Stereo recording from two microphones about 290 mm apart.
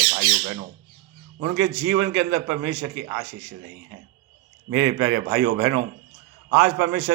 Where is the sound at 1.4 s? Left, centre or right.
Right.